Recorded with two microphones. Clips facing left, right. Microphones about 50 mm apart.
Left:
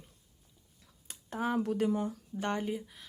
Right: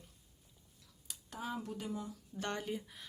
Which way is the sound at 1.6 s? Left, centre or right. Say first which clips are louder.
Left 11 dB; left.